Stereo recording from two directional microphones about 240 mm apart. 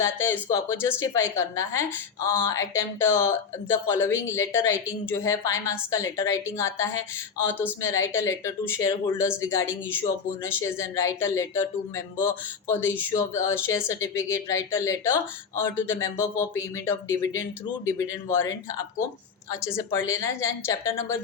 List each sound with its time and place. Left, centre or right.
0.0 s speech: centre